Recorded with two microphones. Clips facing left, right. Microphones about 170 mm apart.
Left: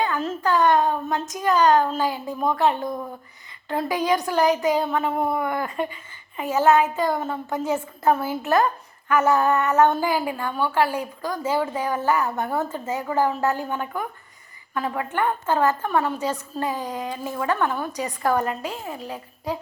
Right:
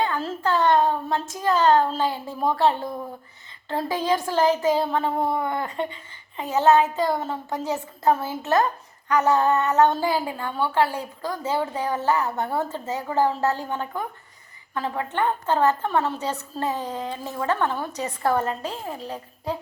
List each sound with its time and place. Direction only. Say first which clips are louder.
0.0 s a woman's voice: left 1 dB; 30° right (ahead or behind)